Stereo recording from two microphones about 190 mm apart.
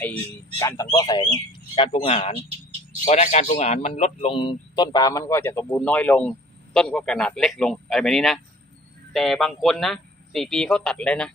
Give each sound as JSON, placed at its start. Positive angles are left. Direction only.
{"t": 0.9, "sound": "speech", "side_deg": 20}